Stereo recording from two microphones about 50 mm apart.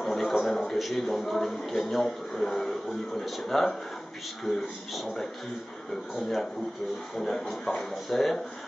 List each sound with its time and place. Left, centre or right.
0.0 s a sound: centre
0.7 s a man's voice: centre
7.2 s speech: centre